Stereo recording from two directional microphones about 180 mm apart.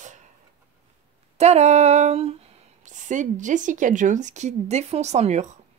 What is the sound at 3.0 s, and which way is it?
A woman's voice, 45° right (ahead or behind).